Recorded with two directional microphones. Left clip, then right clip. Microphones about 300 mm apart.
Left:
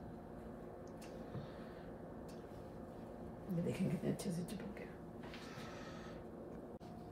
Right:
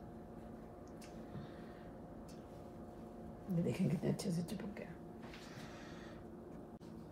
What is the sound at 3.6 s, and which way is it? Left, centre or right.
Speech, right.